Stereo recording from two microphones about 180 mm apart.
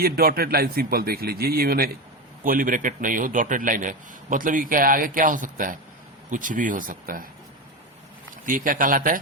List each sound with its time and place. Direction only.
0.0 s a man's voice: 55° right (ahead or behind)
8.4 s a man's voice: 50° right (ahead or behind)